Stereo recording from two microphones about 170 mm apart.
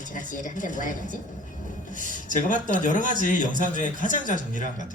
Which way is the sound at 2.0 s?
50° left (ahead or behind).